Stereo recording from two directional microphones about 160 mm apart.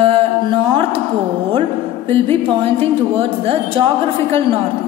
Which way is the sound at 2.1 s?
35° right (ahead or behind).